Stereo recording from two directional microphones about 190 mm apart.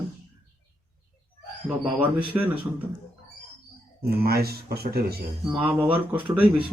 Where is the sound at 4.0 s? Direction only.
55° right (ahead or behind).